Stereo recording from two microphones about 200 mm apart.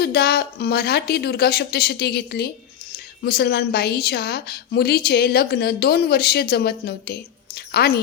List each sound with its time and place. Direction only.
0.0 s a woman's voice: 50° left (ahead or behind)